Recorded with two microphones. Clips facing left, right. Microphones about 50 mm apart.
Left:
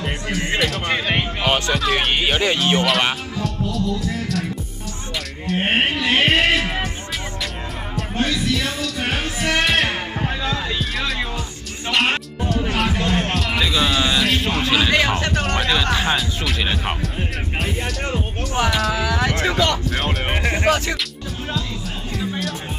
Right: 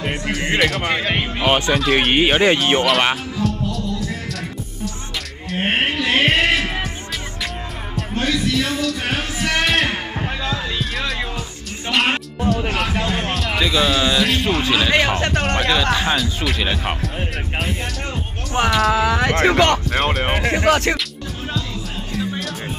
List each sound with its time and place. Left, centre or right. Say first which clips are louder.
0.6 s speech: right 3 dB; centre
1.2 s speech: right 2 dB; centre
2.1 s speech: right 4 dB; right
3.3 s music: right 1 dB; centre
5.5 s music: left 1 dB; centre
8.2 s a sound: right 1 dB; centre
11.0 s music: even; centre
14.9 s speech: right 1 dB; centre
18.7 s speech: right 8 dB; centre
18.9 s speech: right 3 dB; right
19.3 s speech: right 4 dB; right
20.5 s music: right 3 dB; right
22.1 s music: right 1 dB; centre